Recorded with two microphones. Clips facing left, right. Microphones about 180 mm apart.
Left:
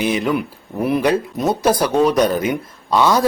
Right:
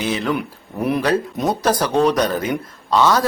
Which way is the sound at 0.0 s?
10° left (ahead or behind).